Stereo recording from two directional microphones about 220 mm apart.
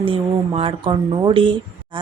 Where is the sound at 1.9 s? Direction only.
20° right (ahead or behind).